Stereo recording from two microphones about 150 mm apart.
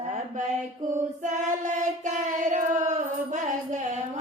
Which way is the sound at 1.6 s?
55° right (ahead or behind).